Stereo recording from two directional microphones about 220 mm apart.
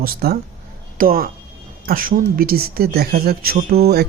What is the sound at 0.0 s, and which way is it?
Speech, 45° right (ahead or behind).